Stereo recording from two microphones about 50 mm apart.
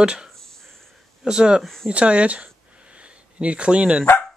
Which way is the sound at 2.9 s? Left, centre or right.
Right.